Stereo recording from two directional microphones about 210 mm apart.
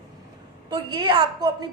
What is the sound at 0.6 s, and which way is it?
A woman's voice, 20° right (ahead or behind).